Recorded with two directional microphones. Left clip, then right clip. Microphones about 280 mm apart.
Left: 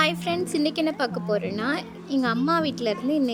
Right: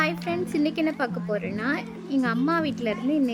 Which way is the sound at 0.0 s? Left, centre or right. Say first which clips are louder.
Left 2 dB; centre.